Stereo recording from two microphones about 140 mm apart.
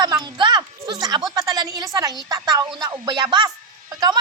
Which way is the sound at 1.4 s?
25° right (ahead or behind).